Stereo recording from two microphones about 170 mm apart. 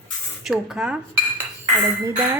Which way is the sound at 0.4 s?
5° right (ahead or behind).